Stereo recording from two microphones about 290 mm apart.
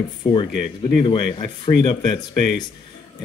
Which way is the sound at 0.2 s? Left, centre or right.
Centre.